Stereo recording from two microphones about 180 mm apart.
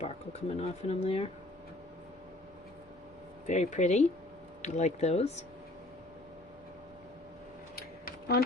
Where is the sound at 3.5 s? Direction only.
40° left (ahead or behind).